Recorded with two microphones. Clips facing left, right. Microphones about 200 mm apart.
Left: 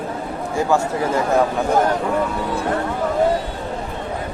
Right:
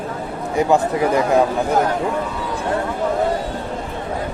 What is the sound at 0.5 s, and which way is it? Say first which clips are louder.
Speech: right 3 dB; 15° right (ahead or behind).